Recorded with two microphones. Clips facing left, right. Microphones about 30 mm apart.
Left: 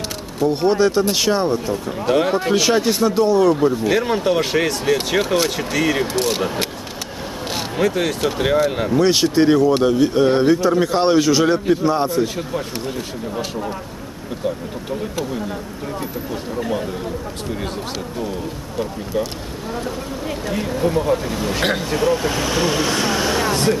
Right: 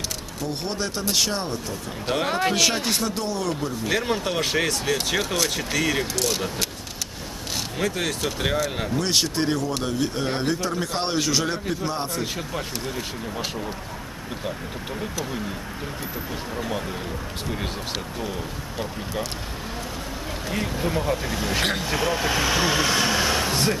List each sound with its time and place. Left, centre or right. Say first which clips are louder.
0.5 s speech: left 13 dB; centre
2.2 s speech: left 4 dB; centre
2.5 s speech: left 6 dB; centre
3.8 s speech: left 7 dB; centre
4.9 s speech: left 6 dB; centre
6.2 s speech: left 5 dB; left
7.7 s speech: left 7 dB; centre
16.5 s speech: left 6 dB; centre
19.1 s speech: left 8 dB; centre
20.4 s speech: left 6 dB; centre